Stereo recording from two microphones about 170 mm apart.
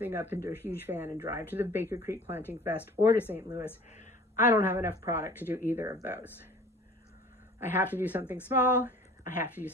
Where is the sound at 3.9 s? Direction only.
45° left (ahead or behind).